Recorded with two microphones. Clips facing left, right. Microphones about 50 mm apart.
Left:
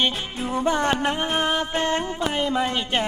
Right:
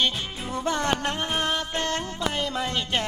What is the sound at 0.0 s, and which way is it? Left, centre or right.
Music, centre.